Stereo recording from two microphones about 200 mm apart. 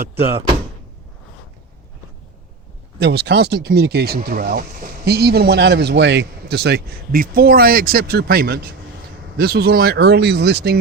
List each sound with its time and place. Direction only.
3.0 s speech: 55° right (ahead or behind)